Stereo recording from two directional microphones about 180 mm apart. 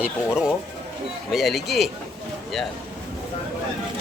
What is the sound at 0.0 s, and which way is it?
Speech, 5° right (ahead or behind).